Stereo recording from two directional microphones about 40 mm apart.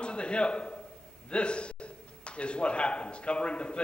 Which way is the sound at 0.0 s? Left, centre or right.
Left.